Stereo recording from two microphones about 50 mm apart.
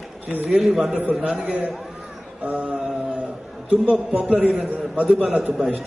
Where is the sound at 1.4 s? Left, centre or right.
Right.